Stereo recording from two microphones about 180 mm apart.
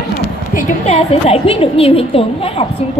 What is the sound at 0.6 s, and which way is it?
Speech, 45° left (ahead or behind).